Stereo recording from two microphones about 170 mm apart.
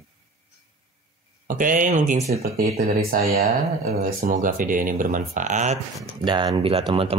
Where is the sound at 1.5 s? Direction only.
50° right (ahead or behind).